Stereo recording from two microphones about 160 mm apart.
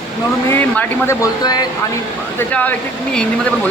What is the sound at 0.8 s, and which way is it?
Speech, 20° left (ahead or behind).